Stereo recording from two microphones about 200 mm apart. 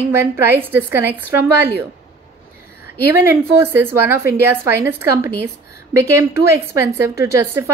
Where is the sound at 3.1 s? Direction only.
10° right (ahead or behind).